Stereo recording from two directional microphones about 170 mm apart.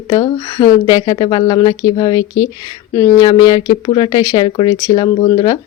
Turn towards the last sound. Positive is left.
turn(degrees=25)  # may be behind; listen again after turning